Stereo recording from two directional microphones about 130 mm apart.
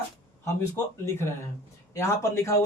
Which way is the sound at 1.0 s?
20° left (ahead or behind).